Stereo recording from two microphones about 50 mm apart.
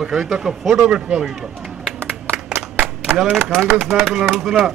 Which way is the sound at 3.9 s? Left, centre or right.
Centre.